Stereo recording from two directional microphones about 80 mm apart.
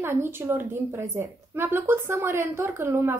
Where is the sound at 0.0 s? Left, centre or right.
Right.